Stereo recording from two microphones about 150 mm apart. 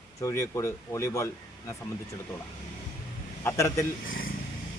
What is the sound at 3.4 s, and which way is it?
Speech, 20° left (ahead or behind).